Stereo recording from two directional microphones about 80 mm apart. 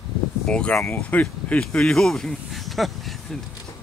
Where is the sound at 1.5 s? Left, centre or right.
Centre.